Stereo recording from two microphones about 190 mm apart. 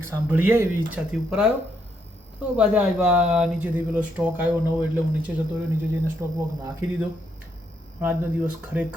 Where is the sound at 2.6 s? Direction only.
5° right (ahead or behind).